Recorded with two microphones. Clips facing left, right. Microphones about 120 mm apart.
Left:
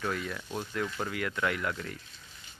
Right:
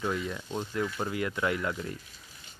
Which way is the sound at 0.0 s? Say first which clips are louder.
Right 2 dB; 20° right (ahead or behind).